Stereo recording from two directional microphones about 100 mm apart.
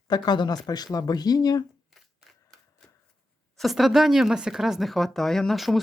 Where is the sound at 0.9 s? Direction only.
40° left (ahead or behind).